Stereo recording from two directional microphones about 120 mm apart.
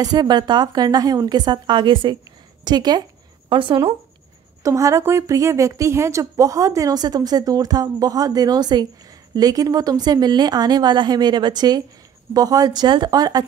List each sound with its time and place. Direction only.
0.0 s a woman's voice: 35° right (ahead or behind)
4.6 s a woman's voice: 25° right (ahead or behind)